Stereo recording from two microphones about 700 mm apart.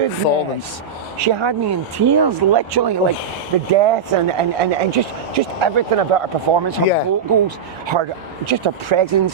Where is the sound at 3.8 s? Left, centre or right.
Right.